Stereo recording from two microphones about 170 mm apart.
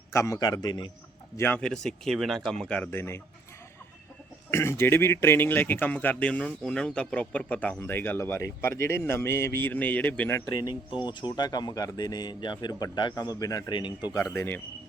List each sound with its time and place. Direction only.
0.1 s speech: 15° left (ahead or behind)
1.4 s a man's voice: 10° left (ahead or behind)
4.5 s speech: 15° left (ahead or behind)
11.0 s speech: 25° left (ahead or behind)